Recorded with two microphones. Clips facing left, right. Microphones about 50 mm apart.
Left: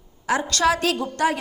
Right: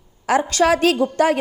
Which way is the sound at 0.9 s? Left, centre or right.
Right.